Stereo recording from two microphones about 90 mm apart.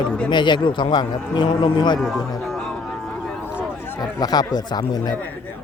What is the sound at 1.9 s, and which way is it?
Speech, centre (ahead or behind).